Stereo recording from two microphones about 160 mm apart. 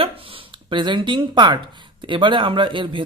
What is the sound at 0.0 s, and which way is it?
Speech, 35° right (ahead or behind).